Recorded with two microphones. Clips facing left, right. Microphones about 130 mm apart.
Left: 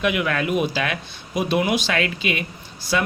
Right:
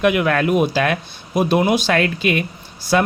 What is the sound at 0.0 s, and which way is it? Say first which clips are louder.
Speech: right 6 dB; 50° right (ahead or behind).